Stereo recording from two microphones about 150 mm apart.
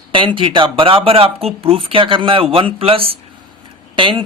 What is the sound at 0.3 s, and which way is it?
Speech, 35° right (ahead or behind).